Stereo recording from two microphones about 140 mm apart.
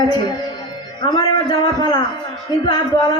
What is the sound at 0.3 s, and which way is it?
Speech, 30° left (ahead or behind).